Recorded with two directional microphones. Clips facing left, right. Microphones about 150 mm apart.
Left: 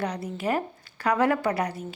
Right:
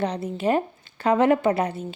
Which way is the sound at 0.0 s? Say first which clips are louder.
Right 5 dB; 25° right (ahead or behind).